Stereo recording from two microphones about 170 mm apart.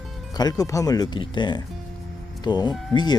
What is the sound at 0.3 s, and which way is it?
Speech, 25° left (ahead or behind).